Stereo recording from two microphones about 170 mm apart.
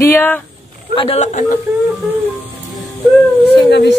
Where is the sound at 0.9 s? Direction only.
35° left (ahead or behind).